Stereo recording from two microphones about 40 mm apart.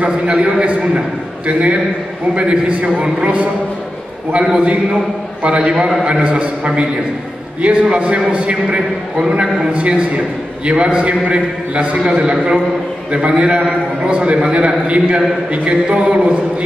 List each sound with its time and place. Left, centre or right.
0.0 s a man's voice: right
4.6 s a man's voice: right